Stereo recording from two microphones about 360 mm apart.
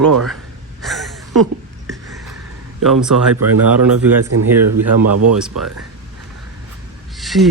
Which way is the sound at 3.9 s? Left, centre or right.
Right.